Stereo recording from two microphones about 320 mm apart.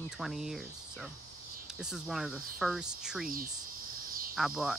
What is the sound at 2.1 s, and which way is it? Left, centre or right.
Speech, centre.